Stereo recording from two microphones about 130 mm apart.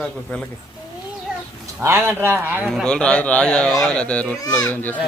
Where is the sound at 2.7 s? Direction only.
5° left (ahead or behind).